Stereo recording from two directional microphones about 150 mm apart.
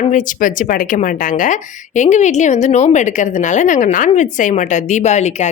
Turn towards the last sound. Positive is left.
turn(degrees=50)  # may be behind; listen again after turning